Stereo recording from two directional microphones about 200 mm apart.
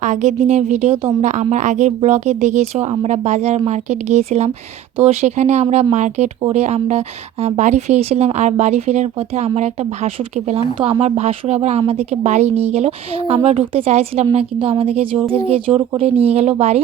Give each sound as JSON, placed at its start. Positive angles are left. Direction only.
{"t": 0.0, "sound": "a woman's voice", "side_deg": -35}